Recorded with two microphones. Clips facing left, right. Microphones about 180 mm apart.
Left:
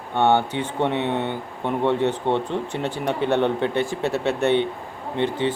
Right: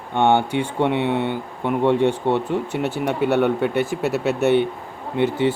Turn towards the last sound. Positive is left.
turn(degrees=-10)  # may be behind; listen again after turning